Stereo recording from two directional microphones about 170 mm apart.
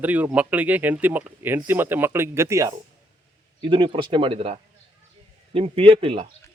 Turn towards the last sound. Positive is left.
turn(degrees=-35)  # may be behind; listen again after turning